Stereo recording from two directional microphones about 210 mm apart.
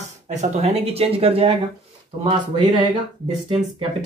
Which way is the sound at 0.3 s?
30° right (ahead or behind).